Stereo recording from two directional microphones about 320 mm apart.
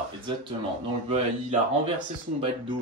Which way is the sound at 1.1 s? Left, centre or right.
Centre.